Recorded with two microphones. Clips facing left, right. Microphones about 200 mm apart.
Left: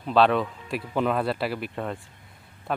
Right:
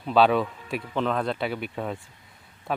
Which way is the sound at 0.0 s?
Centre (ahead or behind).